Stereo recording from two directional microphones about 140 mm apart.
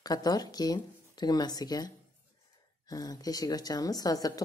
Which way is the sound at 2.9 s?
25° left (ahead or behind).